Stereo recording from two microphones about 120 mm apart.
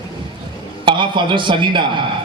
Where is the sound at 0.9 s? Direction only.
40° right (ahead or behind).